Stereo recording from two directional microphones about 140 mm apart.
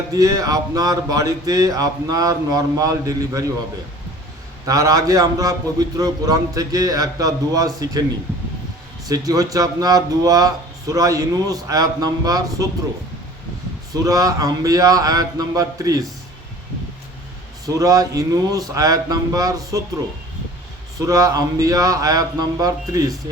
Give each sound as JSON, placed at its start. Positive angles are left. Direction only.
{"t": 0.1, "sound": "speech", "side_deg": -25}
{"t": 4.6, "sound": "speech", "side_deg": -25}
{"t": 9.0, "sound": "speech", "side_deg": -25}
{"t": 13.9, "sound": "speech", "side_deg": -25}
{"t": 17.7, "sound": "speech", "side_deg": -25}
{"t": 21.0, "sound": "speech", "side_deg": -25}